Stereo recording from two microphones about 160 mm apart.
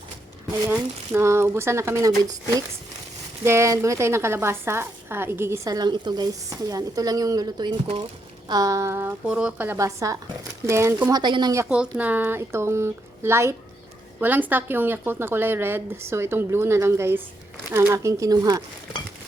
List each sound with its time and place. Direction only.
0.7 s a woman's voice: 15° right (ahead or behind)
3.4 s a woman's voice: 15° right (ahead or behind)
11.2 s a woman's voice: 30° right (ahead or behind)
11.7 s a woman's voice: 10° right (ahead or behind); by 18.6 s 25° right (ahead or behind)